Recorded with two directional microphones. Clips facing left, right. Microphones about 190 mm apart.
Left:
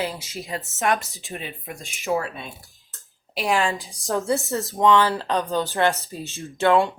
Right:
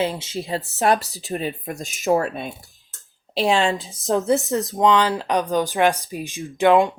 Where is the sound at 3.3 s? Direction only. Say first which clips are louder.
Right 4 dB; 25° right (ahead or behind).